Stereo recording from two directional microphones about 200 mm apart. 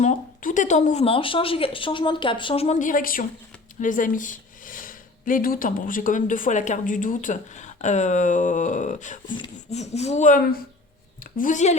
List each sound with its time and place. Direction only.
0.0 s a woman's voice: 40° left (ahead or behind)